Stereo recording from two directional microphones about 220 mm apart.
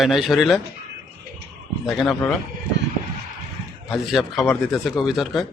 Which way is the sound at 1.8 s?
Centre (ahead or behind).